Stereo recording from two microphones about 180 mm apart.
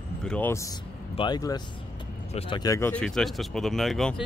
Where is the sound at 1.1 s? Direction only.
25° left (ahead or behind).